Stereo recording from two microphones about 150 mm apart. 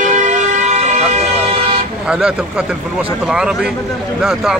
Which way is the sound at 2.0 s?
5° right (ahead or behind).